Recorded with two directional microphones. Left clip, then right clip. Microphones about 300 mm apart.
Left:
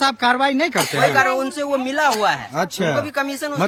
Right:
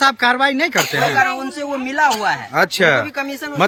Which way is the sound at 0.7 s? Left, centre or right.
Right.